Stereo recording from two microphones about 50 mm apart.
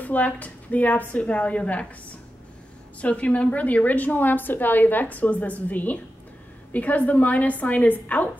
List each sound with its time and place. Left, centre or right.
0.0 s a woman's voice: left
3.0 s a woman's voice: left